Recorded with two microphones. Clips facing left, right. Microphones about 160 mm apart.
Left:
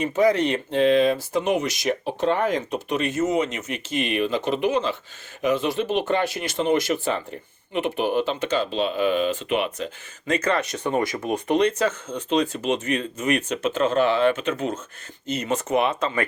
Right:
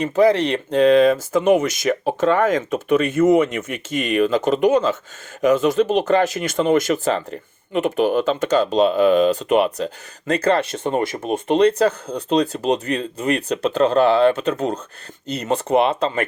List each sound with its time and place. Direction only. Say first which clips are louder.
0.0 s speech: right 4 dB; 30° right (ahead or behind)